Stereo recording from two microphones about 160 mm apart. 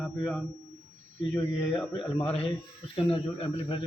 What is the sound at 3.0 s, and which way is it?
Speech, 35° left (ahead or behind).